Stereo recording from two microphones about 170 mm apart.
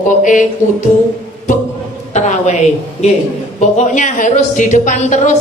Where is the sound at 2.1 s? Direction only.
45° left (ahead or behind).